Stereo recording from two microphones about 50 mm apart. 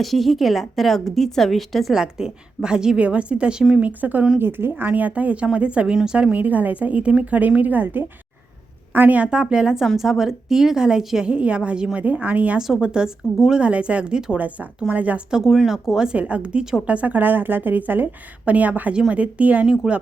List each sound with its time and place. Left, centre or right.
0.0 s a woman's voice: centre
1.9 s a woman's voice: centre
3.8 s a woman's voice: right
4.4 s a woman's voice: right; by 6.1 s centre
6.3 s a woman's voice: right
9.1 s a woman's voice: right
11.9 s a woman's voice: right
12.5 s a woman's voice: centre
14.3 s a woman's voice: right
15.4 s a woman's voice: centre
16.1 s a woman's voice: right
19.6 s a woman's voice: centre